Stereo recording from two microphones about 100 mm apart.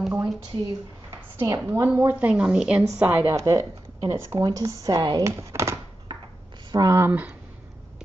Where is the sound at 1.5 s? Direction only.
25° right (ahead or behind).